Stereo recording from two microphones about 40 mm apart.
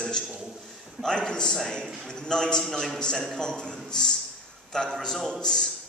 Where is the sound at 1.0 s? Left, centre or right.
Centre.